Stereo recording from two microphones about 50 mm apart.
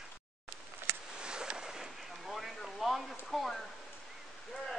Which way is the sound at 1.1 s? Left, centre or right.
Centre.